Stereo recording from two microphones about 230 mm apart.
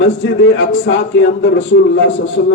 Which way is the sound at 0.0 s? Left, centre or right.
Left.